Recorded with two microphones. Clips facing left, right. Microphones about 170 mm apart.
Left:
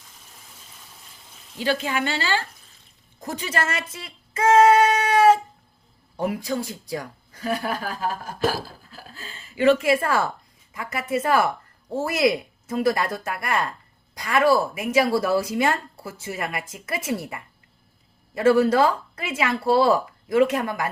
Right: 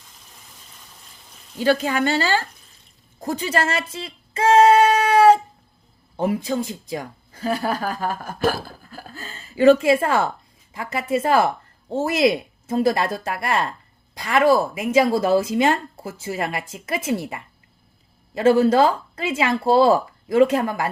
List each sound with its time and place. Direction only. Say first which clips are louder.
1.5 s a woman's voice: right 5 dB; 45° right (ahead or behind)
3.2 s female singing: right 5 dB; 35° right (ahead or behind)
6.1 s a woman's voice: right 3 dB; 25° right (ahead or behind)